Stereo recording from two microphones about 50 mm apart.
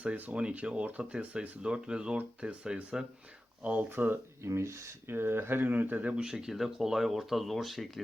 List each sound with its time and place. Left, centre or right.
0.0 s speech: right
3.8 s speech: right
4.4 s speech: right
5.0 s speech: right
6.0 s speech: right
6.2 s speech: centre